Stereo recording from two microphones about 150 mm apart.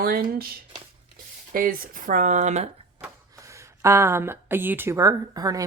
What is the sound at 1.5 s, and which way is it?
Speech, 70° right (ahead or behind).